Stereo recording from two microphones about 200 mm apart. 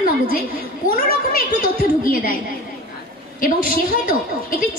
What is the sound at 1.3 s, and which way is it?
A woman's voice, 45° left (ahead or behind).